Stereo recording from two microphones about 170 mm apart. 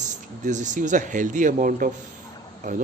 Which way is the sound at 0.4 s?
45° right (ahead or behind).